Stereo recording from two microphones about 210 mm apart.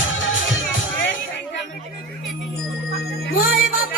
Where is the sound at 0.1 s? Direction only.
65° left (ahead or behind).